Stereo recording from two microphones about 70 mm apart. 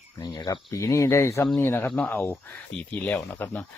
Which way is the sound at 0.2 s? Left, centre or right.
Left.